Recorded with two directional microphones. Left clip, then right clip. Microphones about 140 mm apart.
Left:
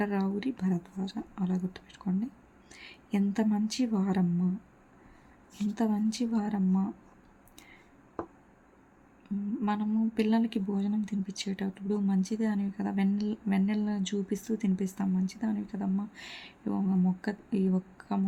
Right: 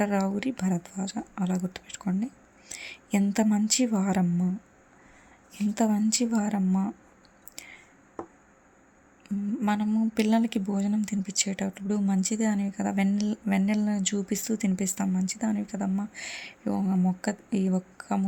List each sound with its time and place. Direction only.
0.0 s speech: 30° right (ahead or behind)
5.7 s a woman's voice: 30° right (ahead or behind)
7.5 s a sound: 30° right (ahead or behind)
9.6 s a woman's voice: 25° right (ahead or behind)